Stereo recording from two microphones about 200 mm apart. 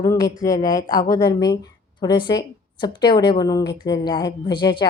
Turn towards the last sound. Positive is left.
turn(degrees=25)  # may be behind; listen again after turning